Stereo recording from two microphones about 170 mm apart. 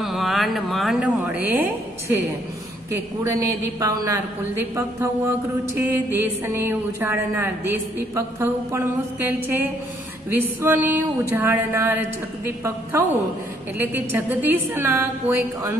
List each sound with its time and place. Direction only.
0.0 s a woman's voice: centre (ahead or behind)